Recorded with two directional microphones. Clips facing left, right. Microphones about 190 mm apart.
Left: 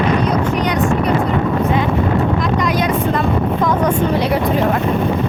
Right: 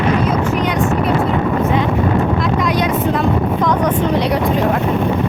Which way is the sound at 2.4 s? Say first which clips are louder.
Even; centre (ahead or behind).